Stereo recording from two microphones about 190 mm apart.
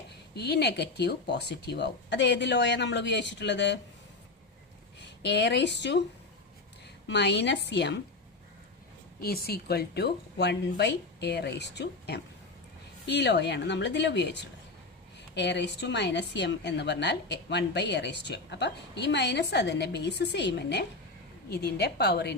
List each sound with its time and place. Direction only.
0.3 s a woman's voice: 60° left (ahead or behind)
4.9 s a woman's voice: 65° left (ahead or behind)
7.1 s a woman's voice: 65° left (ahead or behind)
9.2 s a woman's voice: 55° left (ahead or behind)